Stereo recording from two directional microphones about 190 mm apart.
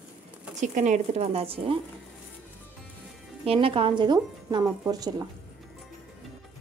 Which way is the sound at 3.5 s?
30° right (ahead or behind).